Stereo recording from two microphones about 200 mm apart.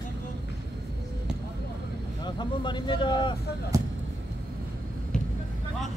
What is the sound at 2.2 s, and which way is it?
Speech, 20° left (ahead or behind).